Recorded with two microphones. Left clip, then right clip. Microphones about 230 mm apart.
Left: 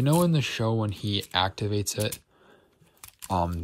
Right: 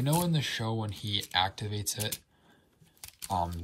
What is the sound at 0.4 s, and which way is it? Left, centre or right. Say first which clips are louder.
Speech: left 5 dB; left.